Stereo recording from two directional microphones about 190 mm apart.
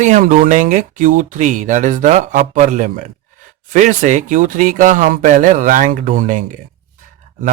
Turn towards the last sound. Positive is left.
turn(degrees=-45)  # may be behind; listen again after turning